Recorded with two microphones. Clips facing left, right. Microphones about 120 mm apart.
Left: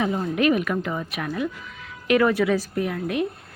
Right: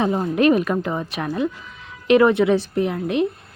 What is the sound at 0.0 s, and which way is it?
A woman's voice, 35° right (ahead or behind).